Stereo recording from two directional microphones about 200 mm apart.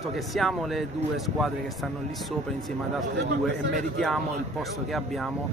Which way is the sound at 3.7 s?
Centre (ahead or behind).